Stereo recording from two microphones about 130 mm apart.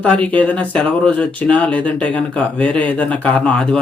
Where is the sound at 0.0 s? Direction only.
10° left (ahead or behind).